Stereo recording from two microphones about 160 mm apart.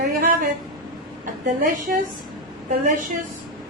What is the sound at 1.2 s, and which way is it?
Speech, 55° right (ahead or behind).